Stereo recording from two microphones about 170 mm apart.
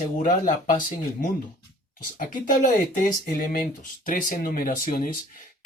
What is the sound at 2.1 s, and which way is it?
Speech, 50° left (ahead or behind).